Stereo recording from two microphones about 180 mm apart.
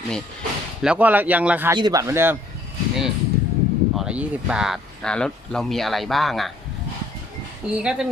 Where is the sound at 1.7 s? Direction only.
20° right (ahead or behind).